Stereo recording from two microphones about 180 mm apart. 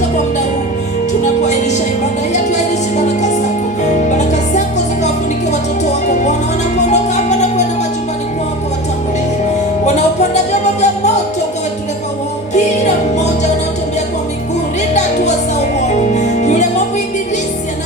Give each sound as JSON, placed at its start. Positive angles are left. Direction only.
{"t": 2.3, "sound": "music", "side_deg": 40}
{"t": 6.8, "sound": "music", "side_deg": 40}
{"t": 9.8, "sound": "music", "side_deg": 40}
{"t": 12.5, "sound": "music", "side_deg": 40}
{"t": 16.0, "sound": "music", "side_deg": 40}